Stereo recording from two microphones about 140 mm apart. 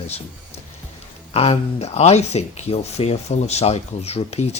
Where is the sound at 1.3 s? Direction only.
45° left (ahead or behind).